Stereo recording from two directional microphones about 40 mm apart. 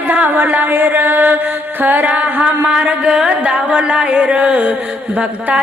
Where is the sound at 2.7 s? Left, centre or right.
Right.